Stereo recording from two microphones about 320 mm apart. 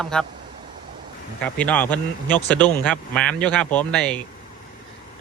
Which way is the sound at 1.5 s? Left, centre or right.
Centre.